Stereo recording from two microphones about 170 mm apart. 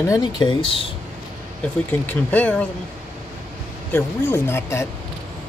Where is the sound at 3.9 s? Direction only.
15° left (ahead or behind).